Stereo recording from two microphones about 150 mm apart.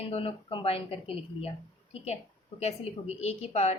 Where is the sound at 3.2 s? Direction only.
45° left (ahead or behind).